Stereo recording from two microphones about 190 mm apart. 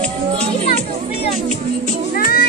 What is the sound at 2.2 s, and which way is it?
Music, 50° left (ahead or behind).